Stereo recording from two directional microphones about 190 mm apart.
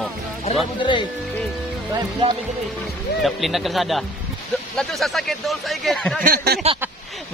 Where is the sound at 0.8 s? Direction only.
25° left (ahead or behind).